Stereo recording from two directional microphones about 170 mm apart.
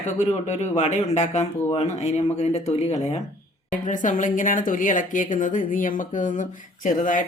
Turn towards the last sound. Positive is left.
turn(degrees=50)  # may be behind; listen again after turning